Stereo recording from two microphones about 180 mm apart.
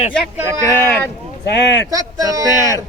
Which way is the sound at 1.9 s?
20° right (ahead or behind).